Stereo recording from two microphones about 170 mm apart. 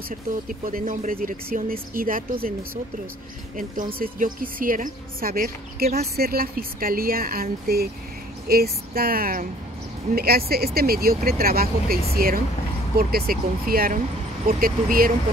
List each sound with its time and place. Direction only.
0.1 s speech: 50° right (ahead or behind)
3.5 s a woman's voice: 50° right (ahead or behind)